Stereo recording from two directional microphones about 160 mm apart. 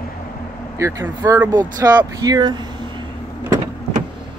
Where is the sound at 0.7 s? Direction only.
20° right (ahead or behind).